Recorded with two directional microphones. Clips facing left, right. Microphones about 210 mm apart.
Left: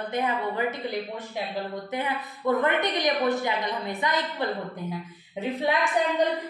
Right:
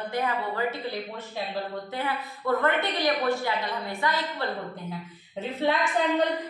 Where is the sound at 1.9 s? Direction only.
20° left (ahead or behind).